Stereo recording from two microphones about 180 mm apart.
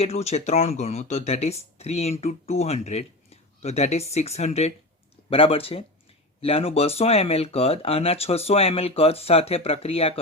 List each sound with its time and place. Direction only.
0.0 s speech: 35° left (ahead or behind)